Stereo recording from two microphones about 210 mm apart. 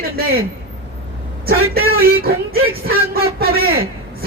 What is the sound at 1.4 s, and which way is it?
Speech, 45° right (ahead or behind).